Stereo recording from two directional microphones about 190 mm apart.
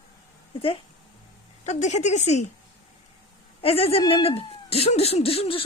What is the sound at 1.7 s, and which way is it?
Speech, 40° left (ahead or behind).